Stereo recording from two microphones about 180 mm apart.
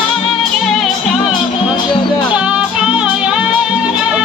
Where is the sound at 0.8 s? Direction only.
Centre (ahead or behind).